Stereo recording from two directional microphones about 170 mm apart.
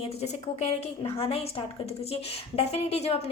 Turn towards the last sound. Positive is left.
turn(degrees=35)  # may be behind; listen again after turning